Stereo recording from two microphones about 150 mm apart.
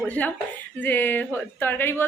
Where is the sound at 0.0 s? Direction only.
10° left (ahead or behind).